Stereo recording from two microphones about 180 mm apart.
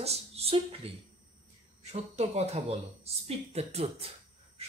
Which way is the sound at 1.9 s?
35° right (ahead or behind).